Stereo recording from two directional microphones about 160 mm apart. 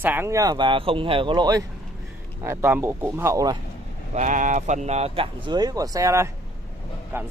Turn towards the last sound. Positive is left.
turn(degrees=-15)  # may be behind; listen again after turning